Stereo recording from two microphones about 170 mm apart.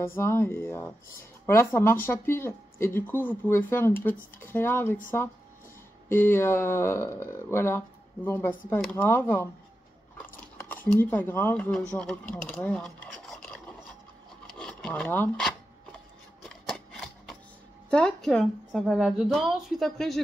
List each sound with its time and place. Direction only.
0.0 s speech: 15° left (ahead or behind)
6.0 s speech: 15° left (ahead or behind)
10.1 s a sound: 10° left (ahead or behind)
14.6 s rub: 5° left (ahead or behind)
16.4 s a sound: centre (ahead or behind)
17.8 s speech: 5° left (ahead or behind)